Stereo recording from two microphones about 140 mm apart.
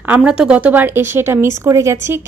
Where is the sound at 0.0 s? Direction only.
10° right (ahead or behind).